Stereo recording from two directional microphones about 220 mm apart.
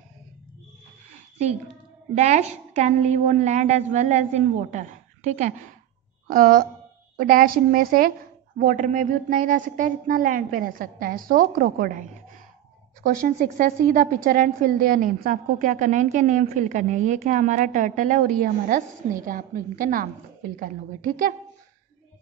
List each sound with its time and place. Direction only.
2.1 s a woman's voice: 35° right (ahead or behind)
6.2 s a woman's voice: 40° right (ahead or behind)